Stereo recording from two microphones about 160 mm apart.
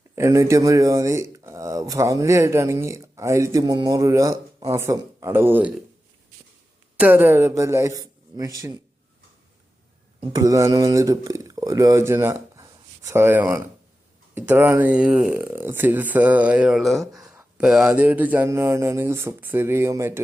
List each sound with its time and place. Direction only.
0.2 s speech: 20° right (ahead or behind)
7.0 s speech: 10° right (ahead or behind)
10.3 s speech: 20° right (ahead or behind)